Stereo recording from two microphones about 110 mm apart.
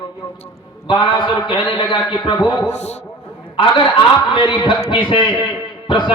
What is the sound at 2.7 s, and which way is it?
Speech, 90° left.